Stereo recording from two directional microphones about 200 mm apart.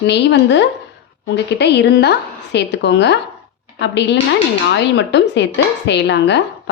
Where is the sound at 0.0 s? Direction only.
60° left (ahead or behind).